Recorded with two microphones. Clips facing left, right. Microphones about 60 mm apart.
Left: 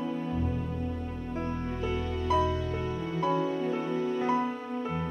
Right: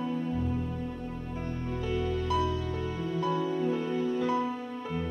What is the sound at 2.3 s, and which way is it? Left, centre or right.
Music, left.